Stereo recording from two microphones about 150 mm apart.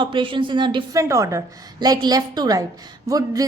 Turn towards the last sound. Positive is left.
turn(degrees=-25)  # may be behind; listen again after turning